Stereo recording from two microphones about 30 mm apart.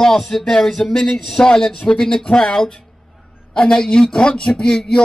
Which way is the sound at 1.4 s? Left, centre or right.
Left.